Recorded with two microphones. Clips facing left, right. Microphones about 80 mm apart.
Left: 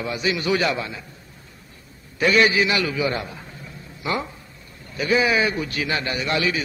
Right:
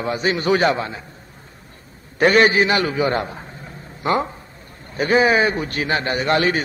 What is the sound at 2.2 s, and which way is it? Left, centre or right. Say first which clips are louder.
A man's voice: right 4 dB; right.